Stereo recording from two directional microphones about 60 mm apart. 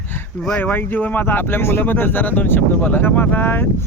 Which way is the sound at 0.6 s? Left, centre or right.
Left.